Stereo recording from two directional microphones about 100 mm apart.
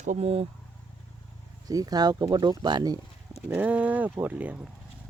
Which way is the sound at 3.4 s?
15° right (ahead or behind).